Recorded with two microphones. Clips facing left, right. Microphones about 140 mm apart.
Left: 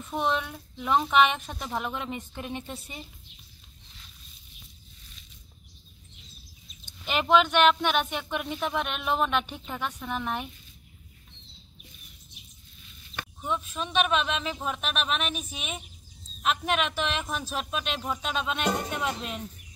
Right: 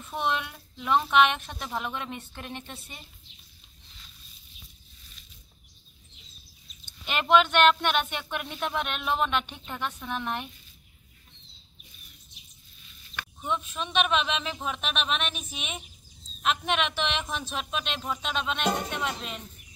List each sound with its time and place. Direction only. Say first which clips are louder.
0.0 s a woman's voice: left 2 dB; centre (ahead or behind)
7.1 s speech: even; 5° left (ahead or behind)
13.4 s speech: even; centre (ahead or behind)